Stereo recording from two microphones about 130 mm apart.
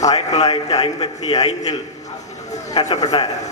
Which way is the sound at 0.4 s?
30° left (ahead or behind).